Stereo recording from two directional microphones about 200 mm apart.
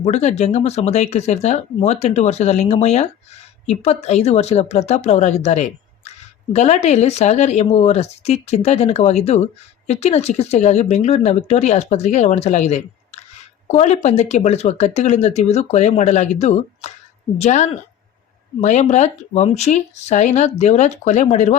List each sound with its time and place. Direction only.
0.0 s speech: 35° left (ahead or behind)